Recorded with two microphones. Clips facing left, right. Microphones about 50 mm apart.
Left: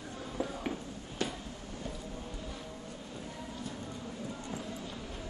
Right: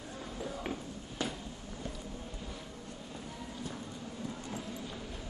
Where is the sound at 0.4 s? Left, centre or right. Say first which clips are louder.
Left 5 dB; left.